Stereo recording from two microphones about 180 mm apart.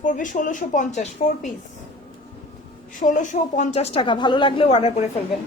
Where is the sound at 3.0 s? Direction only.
45° left (ahead or behind).